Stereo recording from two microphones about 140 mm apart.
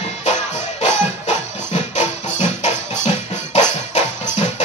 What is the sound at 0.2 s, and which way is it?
Music, 55° left (ahead or behind).